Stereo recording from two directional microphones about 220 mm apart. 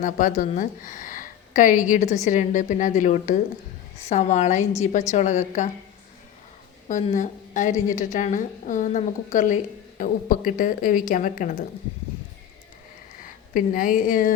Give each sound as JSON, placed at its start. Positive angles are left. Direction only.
{"t": 0.0, "sound": "a woman's voice", "side_deg": 35}
{"t": 6.8, "sound": "a woman's voice", "side_deg": 35}
{"t": 13.5, "sound": "a woman's voice", "side_deg": 40}